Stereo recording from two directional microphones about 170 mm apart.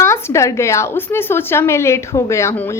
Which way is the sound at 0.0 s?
15° left (ahead or behind).